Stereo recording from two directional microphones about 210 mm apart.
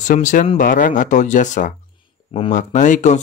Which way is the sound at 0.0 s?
35° left (ahead or behind).